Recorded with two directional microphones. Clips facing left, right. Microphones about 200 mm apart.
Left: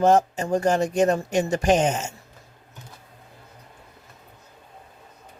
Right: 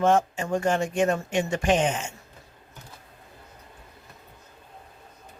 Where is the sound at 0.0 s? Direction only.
40° left (ahead or behind).